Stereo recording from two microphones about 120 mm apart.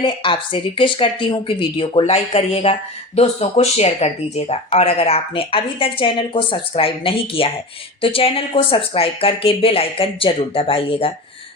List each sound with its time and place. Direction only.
0.0 s speech: 45° left (ahead or behind)